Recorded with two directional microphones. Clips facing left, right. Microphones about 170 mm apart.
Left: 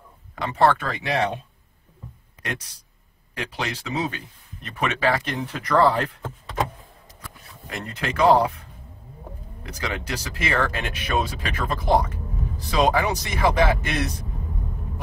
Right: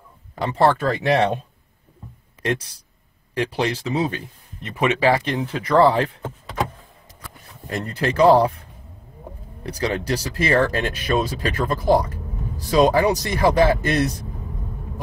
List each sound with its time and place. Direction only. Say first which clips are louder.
0.4 s speech: right 2 dB; 30° right (ahead or behind)
3.3 s speech: right 8 dB; 30° right (ahead or behind)
5.4 s speech: right 3 dB; 10° right (ahead or behind)
7.7 s speech: right 6 dB; 35° right (ahead or behind)
9.6 s speech: right 7 dB; 35° right (ahead or behind)